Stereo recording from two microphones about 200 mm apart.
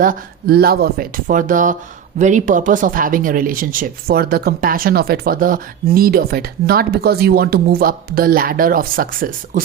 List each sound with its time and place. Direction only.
0.0 s speech: 45° right (ahead or behind)